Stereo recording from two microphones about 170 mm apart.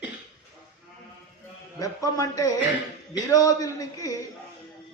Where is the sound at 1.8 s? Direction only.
20° left (ahead or behind).